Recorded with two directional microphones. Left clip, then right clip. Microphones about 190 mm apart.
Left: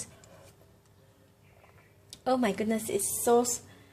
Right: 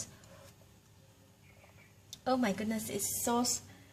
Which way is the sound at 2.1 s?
30° left (ahead or behind).